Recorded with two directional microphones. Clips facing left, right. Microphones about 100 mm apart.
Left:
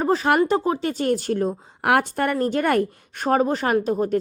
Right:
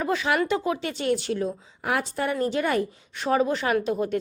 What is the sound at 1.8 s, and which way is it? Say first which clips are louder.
A woman's voice: left 6 dB; 60° left (ahead or behind).